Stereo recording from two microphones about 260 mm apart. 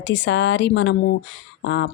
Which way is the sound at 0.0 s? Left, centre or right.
Left.